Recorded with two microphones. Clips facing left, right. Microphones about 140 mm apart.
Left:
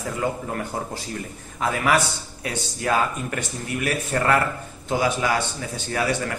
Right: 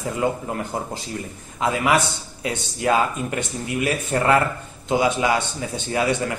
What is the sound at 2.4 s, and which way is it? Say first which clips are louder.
Speech: right 4 dB; 25° right (ahead or behind).